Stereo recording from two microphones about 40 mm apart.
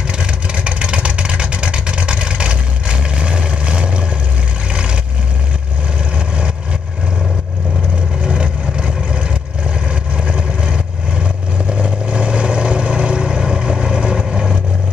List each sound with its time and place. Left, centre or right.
0.2 s vehicle: right
6.1 s vehicle: right
8.2 s vehicle: right